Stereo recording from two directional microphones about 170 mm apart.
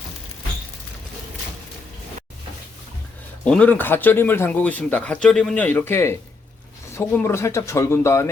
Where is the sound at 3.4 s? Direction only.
5° left (ahead or behind).